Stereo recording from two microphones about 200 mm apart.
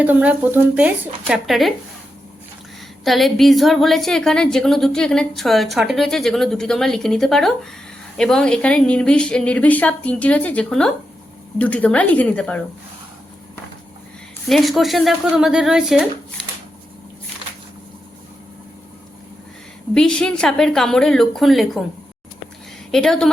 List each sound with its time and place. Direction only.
0.0 s speech: 5° right (ahead or behind)
3.0 s a woman's voice: centre (ahead or behind)
14.4 s a woman's voice: centre (ahead or behind)
19.9 s a woman's voice: 5° left (ahead or behind)
22.9 s speech: centre (ahead or behind)